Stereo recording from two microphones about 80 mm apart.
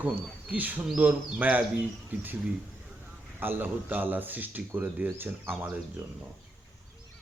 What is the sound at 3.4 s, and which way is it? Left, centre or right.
Speech, right.